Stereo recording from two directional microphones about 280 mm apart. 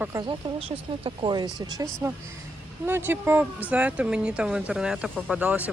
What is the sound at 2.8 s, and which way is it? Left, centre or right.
Speech, centre.